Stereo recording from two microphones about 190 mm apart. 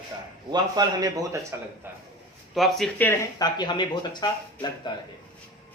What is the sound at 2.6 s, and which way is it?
Speech, centre (ahead or behind).